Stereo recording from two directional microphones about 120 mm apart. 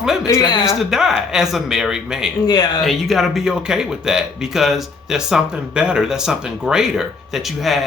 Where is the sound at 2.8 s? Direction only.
Centre (ahead or behind).